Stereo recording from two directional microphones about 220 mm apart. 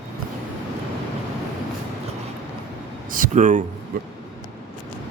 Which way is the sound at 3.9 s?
40° right (ahead or behind).